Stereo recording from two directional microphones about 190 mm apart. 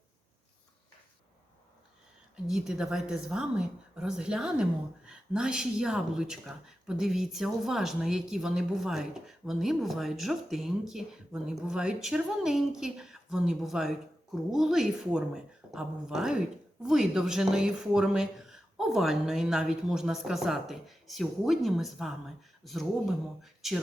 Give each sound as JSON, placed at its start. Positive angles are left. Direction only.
{"t": 2.3, "sound": "speech", "side_deg": -5}